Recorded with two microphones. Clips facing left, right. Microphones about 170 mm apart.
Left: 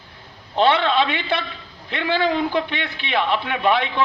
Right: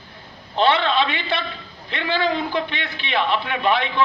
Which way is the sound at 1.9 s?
10° left (ahead or behind).